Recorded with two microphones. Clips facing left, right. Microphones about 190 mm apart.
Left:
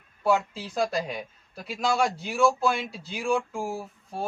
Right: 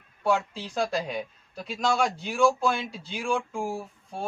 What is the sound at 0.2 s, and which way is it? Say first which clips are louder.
A woman's voice: left 1 dB; 5° left (ahead or behind).